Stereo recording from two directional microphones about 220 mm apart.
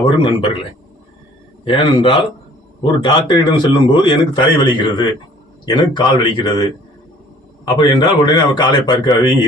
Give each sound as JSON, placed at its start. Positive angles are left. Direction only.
{"t": 0.0, "sound": "a man's voice", "side_deg": 25}
{"t": 1.6, "sound": "a man's voice", "side_deg": 25}